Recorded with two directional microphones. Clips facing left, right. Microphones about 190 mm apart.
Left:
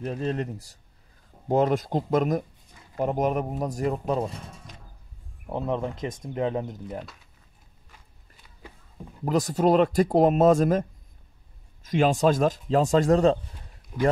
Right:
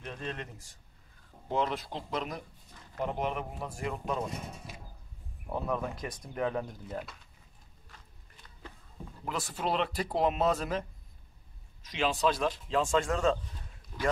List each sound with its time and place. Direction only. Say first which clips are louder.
0.0 s speech: left 11 dB; 40° left (ahead or behind)
4.4 s a sound: right 1 dB; 10° right (ahead or behind)
5.5 s speech: left 5 dB; 25° left (ahead or behind)
7.9 s walk: left 1 dB; 10° left (ahead or behind)
9.2 s speech: left 12 dB; 40° left (ahead or behind)
13.9 s speech: left 10 dB; 15° left (ahead or behind)